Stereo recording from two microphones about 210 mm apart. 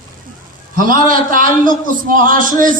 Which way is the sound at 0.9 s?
40° right (ahead or behind).